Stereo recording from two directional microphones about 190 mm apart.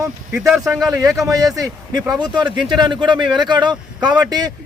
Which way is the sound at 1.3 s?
20° right (ahead or behind).